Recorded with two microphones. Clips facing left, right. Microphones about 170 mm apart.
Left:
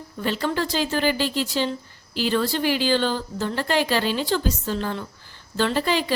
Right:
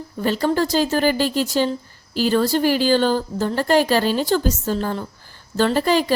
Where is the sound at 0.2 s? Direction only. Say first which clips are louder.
Right 5 dB; 40° right (ahead or behind).